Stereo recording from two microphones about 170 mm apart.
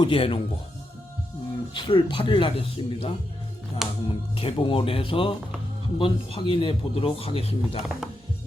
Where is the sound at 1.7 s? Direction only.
30° left (ahead or behind).